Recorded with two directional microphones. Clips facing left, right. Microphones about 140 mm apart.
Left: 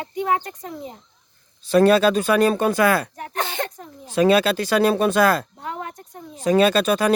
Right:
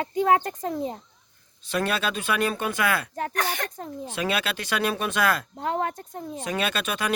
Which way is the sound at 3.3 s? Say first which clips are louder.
Left 4 dB; 25° left (ahead or behind).